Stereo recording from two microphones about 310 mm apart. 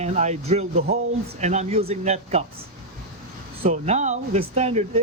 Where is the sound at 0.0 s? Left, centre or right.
Right.